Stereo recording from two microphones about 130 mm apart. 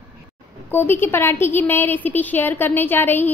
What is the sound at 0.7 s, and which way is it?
A woman's voice, 15° left (ahead or behind).